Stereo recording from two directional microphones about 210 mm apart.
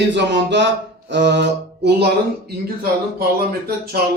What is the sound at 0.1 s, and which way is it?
A man's voice, 55° right (ahead or behind).